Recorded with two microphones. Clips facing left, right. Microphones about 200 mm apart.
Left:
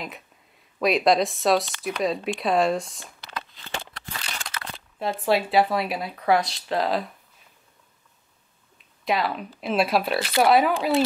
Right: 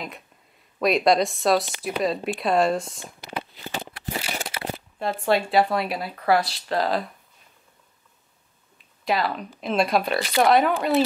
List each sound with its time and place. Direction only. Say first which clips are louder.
0.7 s speech: right 1 dB; centre (ahead or behind)
3.0 s a sound: right 4 dB; 15° right (ahead or behind)
5.2 s speech: even; centre (ahead or behind)
9.0 s speech: even; centre (ahead or behind)